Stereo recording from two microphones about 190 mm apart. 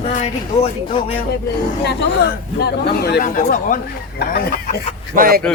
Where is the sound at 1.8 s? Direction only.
60° left (ahead or behind).